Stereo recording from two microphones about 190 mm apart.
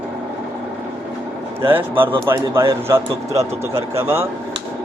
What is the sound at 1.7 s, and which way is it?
Speech, 10° right (ahead or behind).